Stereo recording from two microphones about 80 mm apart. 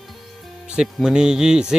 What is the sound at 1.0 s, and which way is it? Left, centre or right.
Speech, centre.